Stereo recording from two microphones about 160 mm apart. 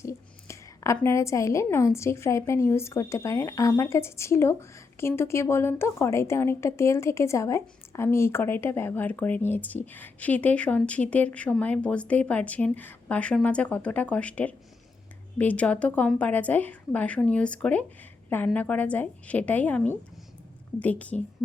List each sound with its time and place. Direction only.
0.0 s a woman's voice: 20° left (ahead or behind)